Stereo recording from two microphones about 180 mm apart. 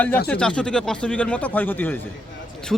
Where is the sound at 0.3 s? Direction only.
5° left (ahead or behind).